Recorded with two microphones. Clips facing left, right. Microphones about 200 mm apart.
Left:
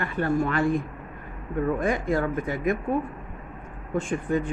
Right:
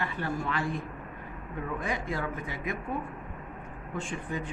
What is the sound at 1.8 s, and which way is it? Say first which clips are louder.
Speech: left 8 dB; 50° left (ahead or behind).